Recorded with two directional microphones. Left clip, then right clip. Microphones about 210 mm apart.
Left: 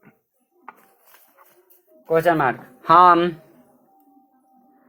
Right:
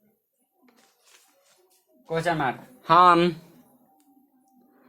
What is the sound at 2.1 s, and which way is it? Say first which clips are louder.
Speech: left 8 dB; 30° left (ahead or behind).